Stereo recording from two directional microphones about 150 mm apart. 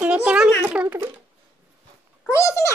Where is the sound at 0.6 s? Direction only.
10° right (ahead or behind).